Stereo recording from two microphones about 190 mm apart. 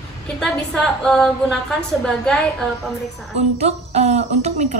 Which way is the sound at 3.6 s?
35° right (ahead or behind).